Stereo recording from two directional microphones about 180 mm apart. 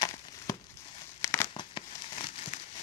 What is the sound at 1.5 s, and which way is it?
Crumpling, 25° left (ahead or behind).